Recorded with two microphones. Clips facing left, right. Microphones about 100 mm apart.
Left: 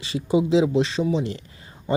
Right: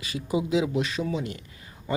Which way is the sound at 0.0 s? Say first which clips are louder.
Left 6 dB; 25° left (ahead or behind).